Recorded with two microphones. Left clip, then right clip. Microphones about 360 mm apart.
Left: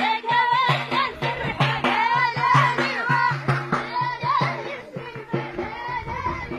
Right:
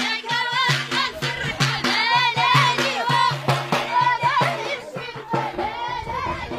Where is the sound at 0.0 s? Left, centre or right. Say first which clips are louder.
Left 3 dB; centre.